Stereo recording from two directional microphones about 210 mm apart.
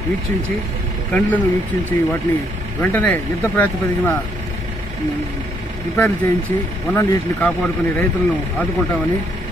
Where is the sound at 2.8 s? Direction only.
10° left (ahead or behind).